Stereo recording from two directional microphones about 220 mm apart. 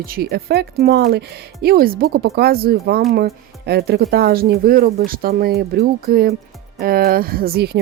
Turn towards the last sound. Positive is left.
turn(degrees=-45)  # may be behind; listen again after turning